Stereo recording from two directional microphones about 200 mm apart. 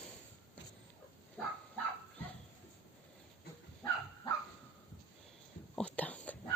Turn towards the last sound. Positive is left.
turn(degrees=5)  # may be behind; listen again after turning